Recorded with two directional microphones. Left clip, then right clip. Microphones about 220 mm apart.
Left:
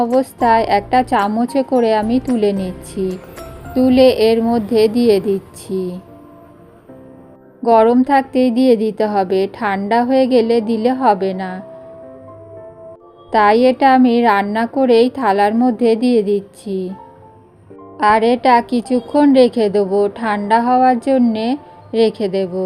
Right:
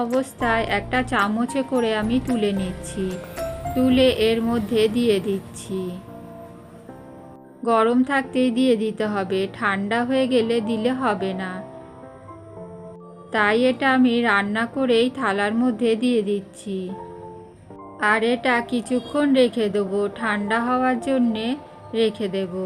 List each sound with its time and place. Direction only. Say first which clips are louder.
0.2 s a woman's voice: left 10 dB; 15° left (ahead or behind)
7.6 s a woman's voice: left 8 dB; 15° left (ahead or behind)
13.3 s a woman's voice: left 8 dB; 15° left (ahead or behind)
18.0 s a woman's voice: left 8 dB; 15° left (ahead or behind)